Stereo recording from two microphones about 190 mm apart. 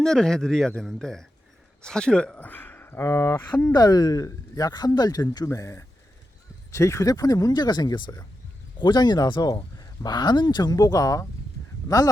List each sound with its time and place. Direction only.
0.0 s speech: 5° left (ahead or behind); by 11.3 s 20° left (ahead or behind)